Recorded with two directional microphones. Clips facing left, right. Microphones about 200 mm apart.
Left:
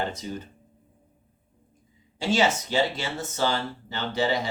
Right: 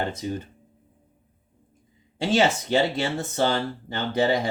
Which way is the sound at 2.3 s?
55° right (ahead or behind).